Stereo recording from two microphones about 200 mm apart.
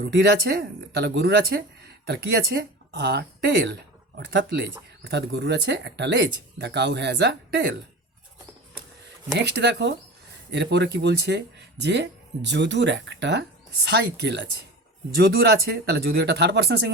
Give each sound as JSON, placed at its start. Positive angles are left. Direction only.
{"t": 0.0, "sound": "speech", "side_deg": -60}
{"t": 9.3, "sound": "speech", "side_deg": -60}